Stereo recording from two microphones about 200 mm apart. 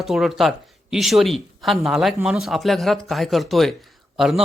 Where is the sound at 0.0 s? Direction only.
Centre (ahead or behind).